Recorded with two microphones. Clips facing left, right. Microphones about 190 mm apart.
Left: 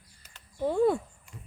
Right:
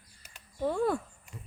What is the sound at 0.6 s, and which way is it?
Speech, 20° left (ahead or behind).